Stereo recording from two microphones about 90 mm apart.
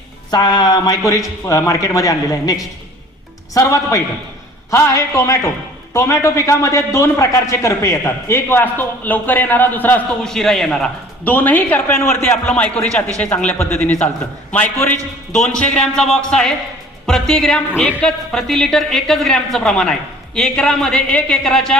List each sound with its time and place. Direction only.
0.3 s a man's voice: 50° left (ahead or behind); by 10.0 s 20° left (ahead or behind)
10.2 s speech: 5° left (ahead or behind)
11.3 s speech: 20° left (ahead or behind)
12.5 s speech: 15° left (ahead or behind)
13.6 s speech: 25° left (ahead or behind); by 21.8 s 5° left (ahead or behind)